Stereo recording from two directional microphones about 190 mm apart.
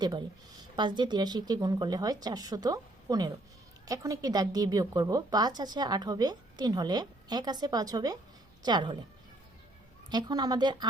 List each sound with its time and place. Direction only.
0.0 s a woman's voice: 20° right (ahead or behind)
10.1 s a woman's voice: 20° right (ahead or behind)